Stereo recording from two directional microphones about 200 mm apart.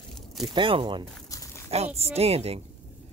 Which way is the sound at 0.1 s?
Centre (ahead or behind).